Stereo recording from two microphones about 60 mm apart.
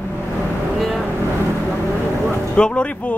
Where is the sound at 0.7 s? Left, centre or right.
Centre.